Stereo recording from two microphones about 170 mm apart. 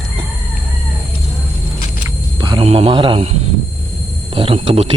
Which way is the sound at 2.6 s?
35° right (ahead or behind).